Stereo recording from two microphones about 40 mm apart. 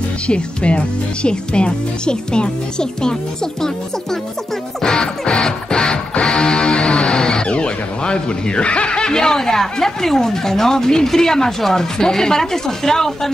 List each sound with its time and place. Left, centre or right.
0.3 s speech: left
4.8 s music: centre